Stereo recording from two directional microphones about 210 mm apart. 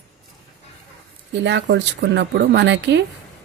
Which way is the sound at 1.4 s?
55° right (ahead or behind).